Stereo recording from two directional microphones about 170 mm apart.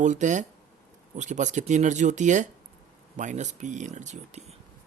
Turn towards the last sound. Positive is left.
turn(degrees=-40)  # may be behind; listen again after turning